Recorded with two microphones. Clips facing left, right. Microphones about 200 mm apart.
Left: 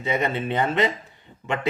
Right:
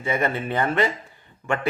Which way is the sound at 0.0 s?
20° left (ahead or behind).